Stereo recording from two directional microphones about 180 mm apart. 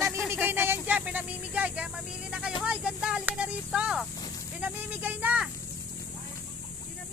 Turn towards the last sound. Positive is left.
turn(degrees=-5)  # may be behind; listen again after turning